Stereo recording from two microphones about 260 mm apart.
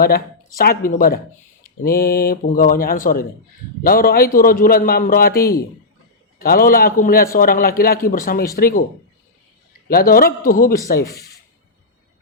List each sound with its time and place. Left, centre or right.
0.0 s a man's voice: left
9.9 s a man's voice: left
11.1 s speech: centre